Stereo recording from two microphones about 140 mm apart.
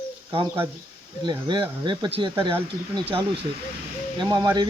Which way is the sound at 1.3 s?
30° right (ahead or behind).